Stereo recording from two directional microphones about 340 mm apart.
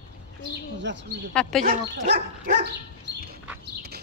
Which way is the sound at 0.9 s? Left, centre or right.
Right.